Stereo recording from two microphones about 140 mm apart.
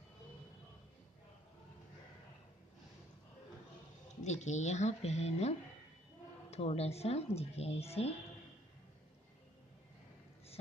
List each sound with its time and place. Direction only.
4.2 s speech: 55° left (ahead or behind)